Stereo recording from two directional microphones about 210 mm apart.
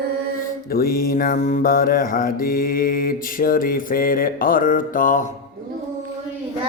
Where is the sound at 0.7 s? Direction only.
45° left (ahead or behind).